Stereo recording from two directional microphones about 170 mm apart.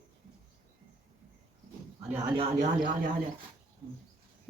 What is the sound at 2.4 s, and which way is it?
Speech, 45° right (ahead or behind).